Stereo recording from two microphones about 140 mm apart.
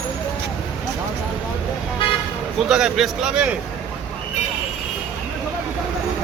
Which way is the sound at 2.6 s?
5° right (ahead or behind).